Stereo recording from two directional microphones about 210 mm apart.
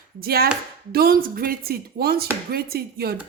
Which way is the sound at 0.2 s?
45° right (ahead or behind).